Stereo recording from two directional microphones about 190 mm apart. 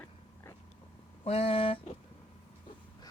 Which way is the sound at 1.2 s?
30° left (ahead or behind).